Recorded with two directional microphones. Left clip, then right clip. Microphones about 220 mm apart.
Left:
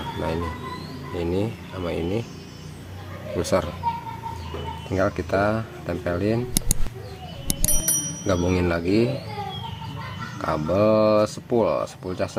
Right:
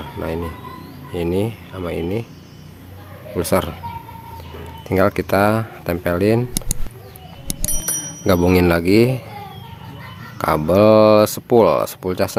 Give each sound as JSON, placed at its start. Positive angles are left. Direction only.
{"t": 0.2, "sound": "speech", "side_deg": -25}
{"t": 3.3, "sound": "speech", "side_deg": -30}
{"t": 4.9, "sound": "speech", "side_deg": -50}
{"t": 7.4, "sound": "bicycle bell", "side_deg": 0}
{"t": 8.3, "sound": "speech", "side_deg": -50}
{"t": 10.4, "sound": "speech", "side_deg": -50}